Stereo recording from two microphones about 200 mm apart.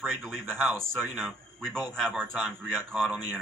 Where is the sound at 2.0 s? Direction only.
Centre (ahead or behind).